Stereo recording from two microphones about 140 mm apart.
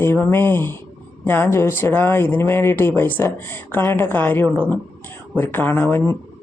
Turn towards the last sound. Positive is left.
turn(degrees=15)  # may be behind; listen again after turning